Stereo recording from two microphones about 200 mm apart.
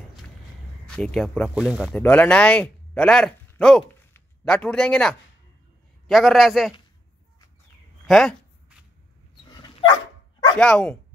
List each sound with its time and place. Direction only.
0.8 s speech: 5° left (ahead or behind)
8.1 s a sound: centre (ahead or behind)
9.5 s dog: 25° left (ahead or behind)
10.6 s speech: 5° left (ahead or behind)